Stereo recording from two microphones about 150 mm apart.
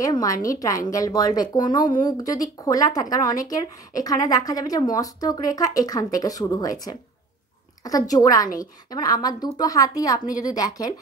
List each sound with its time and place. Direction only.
0.0 s speech: 25° left (ahead or behind)